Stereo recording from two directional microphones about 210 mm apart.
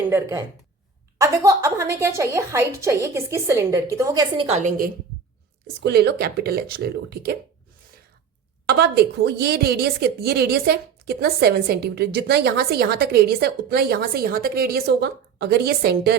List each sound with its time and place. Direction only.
0.1 s a woman's voice: 10° right (ahead or behind)
4.4 s a woman's voice: 35° right (ahead or behind)
5.8 s a woman's voice: 50° right (ahead or behind)
8.6 s a woman's voice: 50° right (ahead or behind)